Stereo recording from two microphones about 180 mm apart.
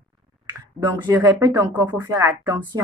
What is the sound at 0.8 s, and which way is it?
Speech, 25° right (ahead or behind).